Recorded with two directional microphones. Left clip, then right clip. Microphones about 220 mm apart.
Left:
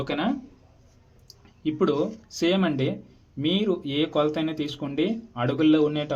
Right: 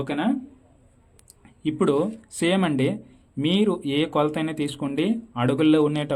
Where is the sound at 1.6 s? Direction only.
35° right (ahead or behind).